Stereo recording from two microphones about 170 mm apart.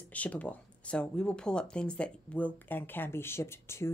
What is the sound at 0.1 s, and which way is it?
Speech, 10° left (ahead or behind).